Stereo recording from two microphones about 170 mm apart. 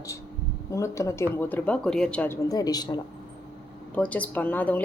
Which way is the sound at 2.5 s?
20° left (ahead or behind).